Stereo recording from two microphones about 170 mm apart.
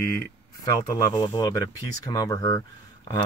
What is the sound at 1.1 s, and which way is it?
Speech, 30° left (ahead or behind).